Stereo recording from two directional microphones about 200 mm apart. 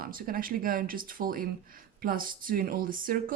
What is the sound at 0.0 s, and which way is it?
Speech, 45° right (ahead or behind).